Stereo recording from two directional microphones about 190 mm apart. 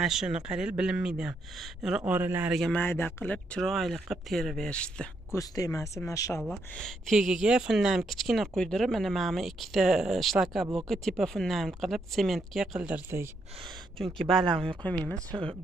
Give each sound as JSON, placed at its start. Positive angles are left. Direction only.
{"t": 0.0, "sound": "speech", "side_deg": 0}
{"t": 5.4, "sound": "speech", "side_deg": 20}
{"t": 6.4, "sound": "speech", "side_deg": 0}
{"t": 14.2, "sound": "speech", "side_deg": -25}
{"t": 14.8, "sound": "speech", "side_deg": 5}